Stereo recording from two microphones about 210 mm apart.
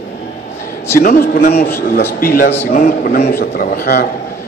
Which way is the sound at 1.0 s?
45° left (ahead or behind).